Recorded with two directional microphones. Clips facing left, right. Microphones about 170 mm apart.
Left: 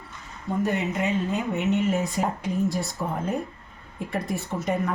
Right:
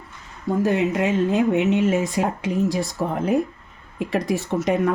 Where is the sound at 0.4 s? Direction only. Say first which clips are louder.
Right 6 dB; 90° right.